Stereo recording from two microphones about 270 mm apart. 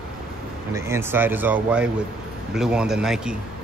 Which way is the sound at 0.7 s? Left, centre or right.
Centre.